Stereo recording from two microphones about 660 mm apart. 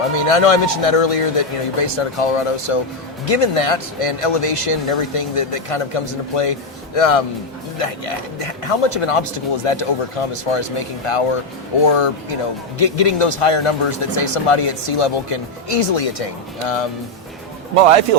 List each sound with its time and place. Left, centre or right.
0.2 s speech: left
17.7 s speech: right